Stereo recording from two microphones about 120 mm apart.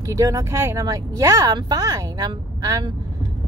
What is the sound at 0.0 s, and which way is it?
Speech, 30° right (ahead or behind).